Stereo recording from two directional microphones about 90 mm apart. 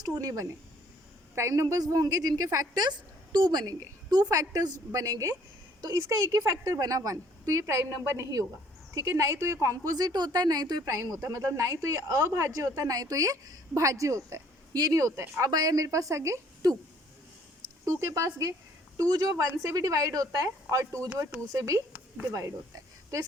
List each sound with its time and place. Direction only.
0.0 s a woman's voice: 40° right (ahead or behind)
11.0 s speech: 40° right (ahead or behind)
17.8 s speech: 40° right (ahead or behind)
22.3 s speech: 35° right (ahead or behind)